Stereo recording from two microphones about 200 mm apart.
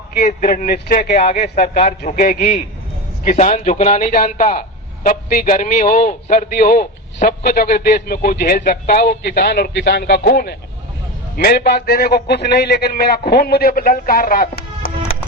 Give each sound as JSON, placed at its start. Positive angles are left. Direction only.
{"t": 0.2, "sound": "a man's voice", "side_deg": 45}